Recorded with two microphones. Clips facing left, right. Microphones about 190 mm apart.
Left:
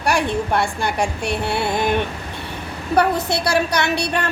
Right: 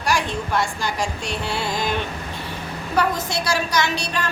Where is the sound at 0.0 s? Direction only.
60° left (ahead or behind).